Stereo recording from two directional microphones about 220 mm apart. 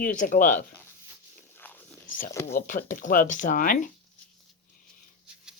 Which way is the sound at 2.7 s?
35° left (ahead or behind).